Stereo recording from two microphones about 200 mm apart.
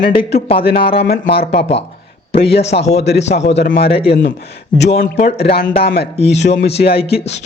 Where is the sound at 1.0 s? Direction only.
55° left (ahead or behind).